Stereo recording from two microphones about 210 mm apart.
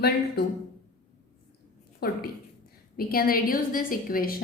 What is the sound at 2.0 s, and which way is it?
A woman's voice, 45° left (ahead or behind).